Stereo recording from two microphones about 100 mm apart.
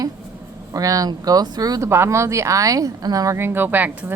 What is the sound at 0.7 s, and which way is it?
A woman's voice, 35° right (ahead or behind).